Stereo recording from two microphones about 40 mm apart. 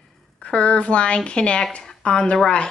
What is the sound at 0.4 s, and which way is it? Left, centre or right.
A woman's voice, left.